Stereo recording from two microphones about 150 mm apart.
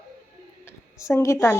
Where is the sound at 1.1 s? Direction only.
20° left (ahead or behind).